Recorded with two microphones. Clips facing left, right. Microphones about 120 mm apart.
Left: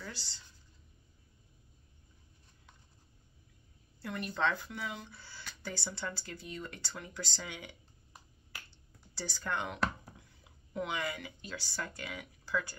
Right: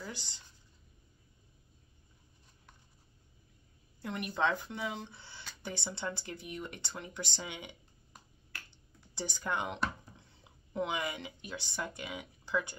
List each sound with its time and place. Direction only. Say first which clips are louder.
0.0 s a sound: right 2 dB; 20° right (ahead or behind)
4.0 s a woman's voice: right 1 dB; 15° right (ahead or behind)
8.6 s computer keyboard: even; 20° right (ahead or behind)
10.4 s speech: right 3 dB; 25° right (ahead or behind)